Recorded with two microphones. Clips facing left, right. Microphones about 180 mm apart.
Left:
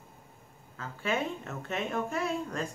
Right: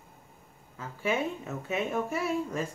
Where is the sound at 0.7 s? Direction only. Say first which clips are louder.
Right 2 dB; 10° right (ahead or behind).